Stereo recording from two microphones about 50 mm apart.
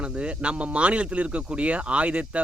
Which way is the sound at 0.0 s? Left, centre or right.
Right.